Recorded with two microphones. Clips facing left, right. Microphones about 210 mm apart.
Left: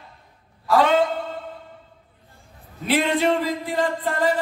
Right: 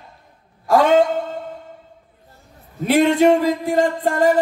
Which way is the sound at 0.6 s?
45° right (ahead or behind).